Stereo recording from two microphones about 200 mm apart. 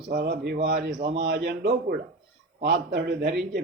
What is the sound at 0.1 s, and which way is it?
A man's voice, 45° right (ahead or behind).